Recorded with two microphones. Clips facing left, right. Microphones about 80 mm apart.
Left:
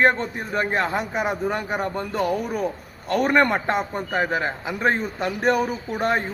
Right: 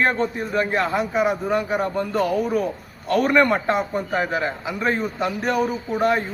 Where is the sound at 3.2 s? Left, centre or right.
Left.